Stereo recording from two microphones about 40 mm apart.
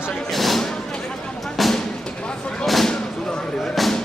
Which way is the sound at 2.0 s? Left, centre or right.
Left.